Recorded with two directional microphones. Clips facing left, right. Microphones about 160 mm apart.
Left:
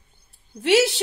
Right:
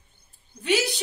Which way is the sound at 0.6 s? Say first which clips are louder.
Left 7 dB; 70° left (ahead or behind).